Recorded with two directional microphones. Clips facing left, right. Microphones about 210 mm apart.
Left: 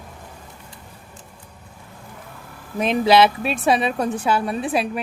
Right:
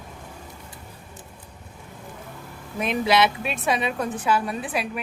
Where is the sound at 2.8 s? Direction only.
30° left (ahead or behind).